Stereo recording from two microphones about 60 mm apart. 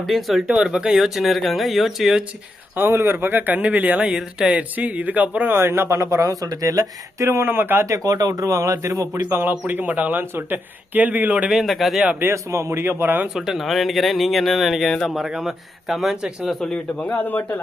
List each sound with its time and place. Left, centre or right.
0.0 s speech: centre
0.5 s speech: centre
2.7 s speech: right
4.2 s speech: centre
4.7 s speech: right
5.5 s speech: right
6.0 s speech: right
7.2 s speech: right
7.9 s a man's voice: right
9.4 s speech: right
11.5 s speech: centre
12.3 s speech: right
13.2 s speech: centre
16.6 s a man's voice: left